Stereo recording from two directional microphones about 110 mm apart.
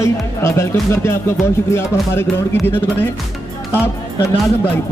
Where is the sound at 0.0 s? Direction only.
25° left (ahead or behind).